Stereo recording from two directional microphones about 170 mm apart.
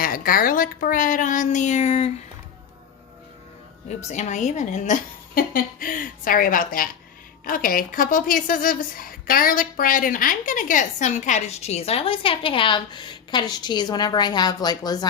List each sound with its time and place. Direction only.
0.0 s a woman's voice: 55° left (ahead or behind); by 2.0 s 40° left (ahead or behind)
3.8 s a woman's voice: 45° left (ahead or behind); by 15.0 s 25° left (ahead or behind)